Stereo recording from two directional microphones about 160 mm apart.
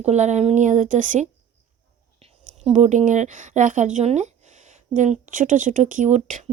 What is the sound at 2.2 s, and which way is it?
A woman's voice, 40° right (ahead or behind).